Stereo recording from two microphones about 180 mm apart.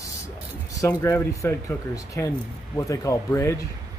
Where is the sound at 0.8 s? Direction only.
15° left (ahead or behind).